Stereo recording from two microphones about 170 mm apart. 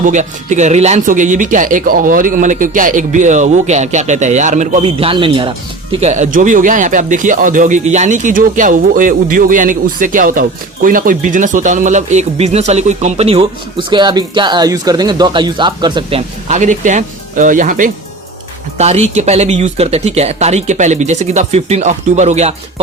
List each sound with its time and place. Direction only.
0.0 s speech: 45° right (ahead or behind)
18.8 s speech: 40° right (ahead or behind)